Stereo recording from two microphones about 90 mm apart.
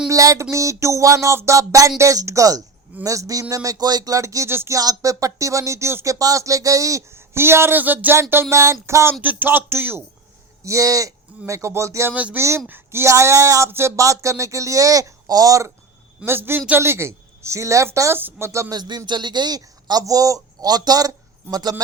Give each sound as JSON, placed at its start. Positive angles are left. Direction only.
{"t": 0.1, "sound": "speech", "side_deg": -35}
{"t": 4.8, "sound": "speech", "side_deg": -40}
{"t": 9.2, "sound": "speech", "side_deg": -20}
{"t": 10.6, "sound": "speech", "side_deg": -35}
{"t": 12.1, "sound": "speech", "side_deg": -15}
{"t": 12.4, "sound": "speech", "side_deg": -30}
{"t": 16.2, "sound": "speech", "side_deg": -25}
{"t": 18.7, "sound": "speech", "side_deg": -50}